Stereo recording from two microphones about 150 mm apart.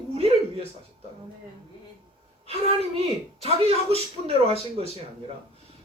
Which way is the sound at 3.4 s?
40° right (ahead or behind).